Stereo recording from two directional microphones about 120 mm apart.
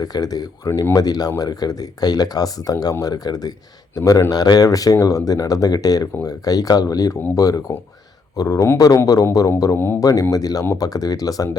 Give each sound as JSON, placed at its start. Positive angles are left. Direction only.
{"t": 0.0, "sound": "speech", "side_deg": 30}